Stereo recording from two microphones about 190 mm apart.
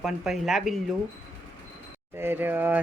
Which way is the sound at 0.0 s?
Centre (ahead or behind).